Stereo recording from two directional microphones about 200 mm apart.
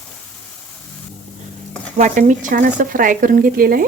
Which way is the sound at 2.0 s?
40° right (ahead or behind).